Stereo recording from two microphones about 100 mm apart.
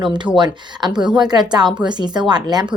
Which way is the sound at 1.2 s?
45° right (ahead or behind).